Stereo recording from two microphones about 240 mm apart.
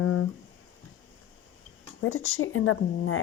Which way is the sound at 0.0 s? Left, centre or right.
Left.